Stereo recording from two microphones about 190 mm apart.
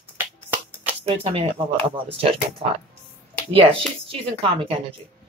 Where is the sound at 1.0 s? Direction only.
30° right (ahead or behind).